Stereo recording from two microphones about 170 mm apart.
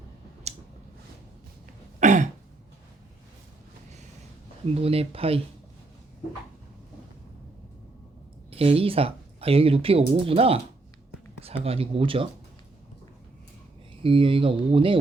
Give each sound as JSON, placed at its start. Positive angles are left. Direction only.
{"t": 0.5, "sound": "a sound", "side_deg": -40}
{"t": 2.0, "sound": "throat clearing", "side_deg": -45}
{"t": 4.6, "sound": "speech", "side_deg": -35}
{"t": 8.4, "sound": "speech", "side_deg": -35}
{"t": 11.6, "sound": "speech", "side_deg": -35}
{"t": 14.0, "sound": "speech", "side_deg": -30}